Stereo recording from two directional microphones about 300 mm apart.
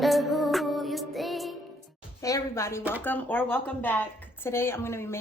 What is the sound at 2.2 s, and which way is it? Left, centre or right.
A woman's voice, centre.